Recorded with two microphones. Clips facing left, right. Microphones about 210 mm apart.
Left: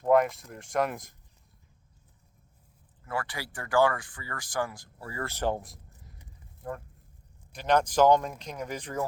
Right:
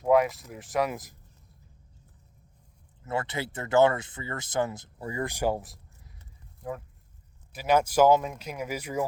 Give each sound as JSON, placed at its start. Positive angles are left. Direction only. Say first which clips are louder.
{"t": 0.0, "sound": "speech", "louder": "right 1 dB", "side_deg": -5}
{"t": 3.0, "sound": "speech", "louder": "right 4 dB", "side_deg": -25}
{"t": 7.5, "sound": "speech", "louder": "right 1 dB", "side_deg": -5}